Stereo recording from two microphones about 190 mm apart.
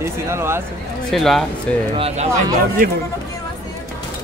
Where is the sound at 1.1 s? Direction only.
Centre (ahead or behind).